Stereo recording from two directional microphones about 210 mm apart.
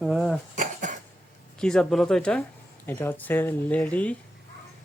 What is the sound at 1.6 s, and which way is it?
Speech, 5° left (ahead or behind).